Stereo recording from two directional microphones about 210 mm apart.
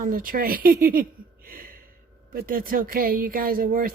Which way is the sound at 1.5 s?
45° right (ahead or behind).